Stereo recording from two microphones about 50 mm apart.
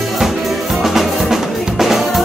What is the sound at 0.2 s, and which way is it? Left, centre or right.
Music, centre.